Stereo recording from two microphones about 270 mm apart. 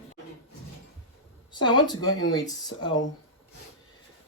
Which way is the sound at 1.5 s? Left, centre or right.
Centre.